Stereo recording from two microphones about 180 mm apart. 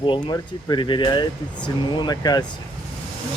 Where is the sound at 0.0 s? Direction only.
25° left (ahead or behind).